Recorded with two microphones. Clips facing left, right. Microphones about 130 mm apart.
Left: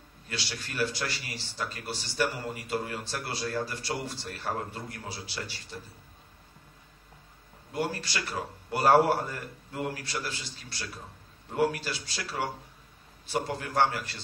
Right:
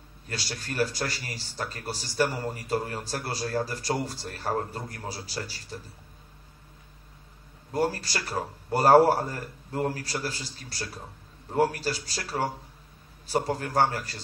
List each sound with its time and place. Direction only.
0.3 s speech: 40° right (ahead or behind)
7.7 s speech: 40° right (ahead or behind)